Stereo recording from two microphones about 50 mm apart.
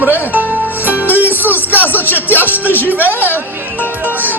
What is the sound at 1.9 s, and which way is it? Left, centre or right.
Speech, left.